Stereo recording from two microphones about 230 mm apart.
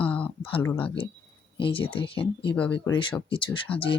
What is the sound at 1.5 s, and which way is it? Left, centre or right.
Speech, left.